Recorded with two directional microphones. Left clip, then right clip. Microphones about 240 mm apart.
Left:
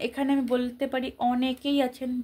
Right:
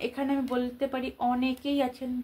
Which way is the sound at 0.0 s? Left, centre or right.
Left.